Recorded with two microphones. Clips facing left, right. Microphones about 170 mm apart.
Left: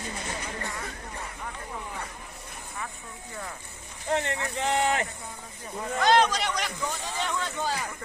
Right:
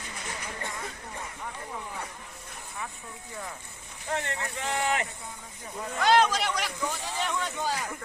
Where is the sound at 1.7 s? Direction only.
5° right (ahead or behind).